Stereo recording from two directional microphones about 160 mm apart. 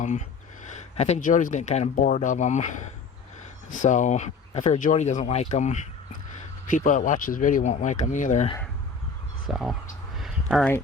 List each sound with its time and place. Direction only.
0.0 s speech: 50° left (ahead or behind)
9.5 s speech: centre (ahead or behind)
10.2 s a sound: centre (ahead or behind)